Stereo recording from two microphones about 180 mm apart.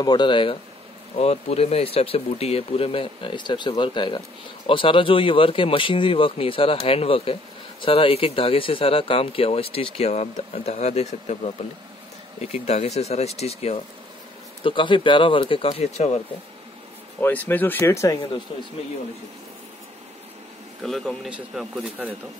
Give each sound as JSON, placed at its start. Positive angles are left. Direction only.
{"t": 0.0, "sound": "a man's voice", "side_deg": 25}
{"t": 17.2, "sound": "speech", "side_deg": 10}
{"t": 18.5, "sound": "speech", "side_deg": 30}
{"t": 20.8, "sound": "speech", "side_deg": 0}